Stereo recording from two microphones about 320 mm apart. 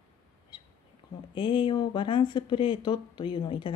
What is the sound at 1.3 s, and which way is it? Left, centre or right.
Speech, centre.